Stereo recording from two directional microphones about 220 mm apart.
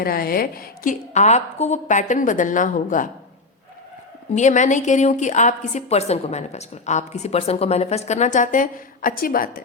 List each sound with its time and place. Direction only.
0.0 s a woman's voice: 40° left (ahead or behind)
4.4 s a woman's voice: 35° left (ahead or behind)